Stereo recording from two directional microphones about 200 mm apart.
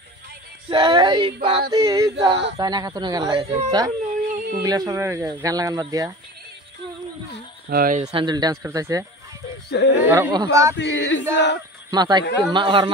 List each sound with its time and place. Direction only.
0.7 s speech: 25° right (ahead or behind)
4.0 s a sound: 40° right (ahead or behind)
4.6 s speech: 20° right (ahead or behind)
7.7 s speech: 40° right (ahead or behind)
8.1 s speech: 25° right (ahead or behind)
9.7 s male singing: 60° left (ahead or behind)
10.0 s speech: 10° right (ahead or behind)
10.8 s male singing: 65° left (ahead or behind)
11.9 s speech: 20° right (ahead or behind)